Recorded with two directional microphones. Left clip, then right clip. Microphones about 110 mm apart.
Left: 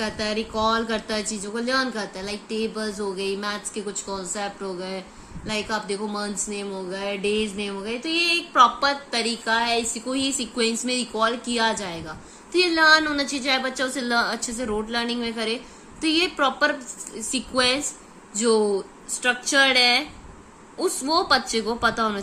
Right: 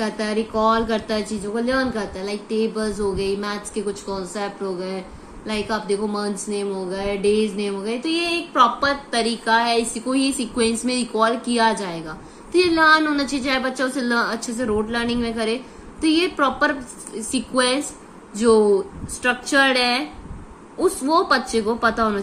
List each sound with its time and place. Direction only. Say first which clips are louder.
0.0 s a woman's voice: right 3 dB; 15° left (ahead or behind)